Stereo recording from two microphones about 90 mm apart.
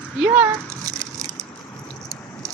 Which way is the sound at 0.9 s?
40° right (ahead or behind).